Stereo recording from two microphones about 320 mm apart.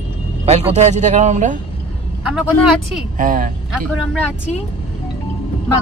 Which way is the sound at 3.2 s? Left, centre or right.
Right.